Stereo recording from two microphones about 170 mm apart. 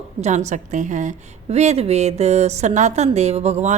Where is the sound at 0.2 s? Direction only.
45° right (ahead or behind).